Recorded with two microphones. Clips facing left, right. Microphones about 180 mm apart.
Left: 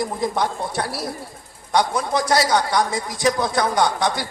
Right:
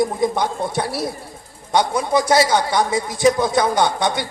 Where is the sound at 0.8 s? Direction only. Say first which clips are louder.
Right 3 dB; centre (ahead or behind).